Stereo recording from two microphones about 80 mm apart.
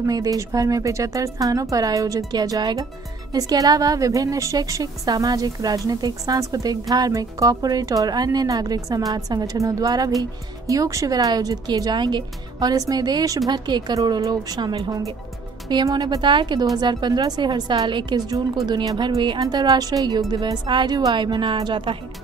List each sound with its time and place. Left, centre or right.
0.0 s a woman's voice: right
13.5 s speech: right
13.9 s speech: right
15.7 s speech: right
16.7 s a woman's voice: right
19.4 s a woman's voice: right
20.6 s a woman's voice: right